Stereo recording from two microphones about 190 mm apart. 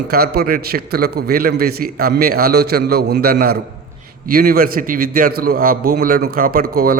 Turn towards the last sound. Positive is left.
turn(degrees=-50)  # may be behind; listen again after turning